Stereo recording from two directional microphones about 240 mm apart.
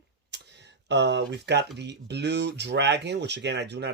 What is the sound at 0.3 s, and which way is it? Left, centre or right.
Tick, right.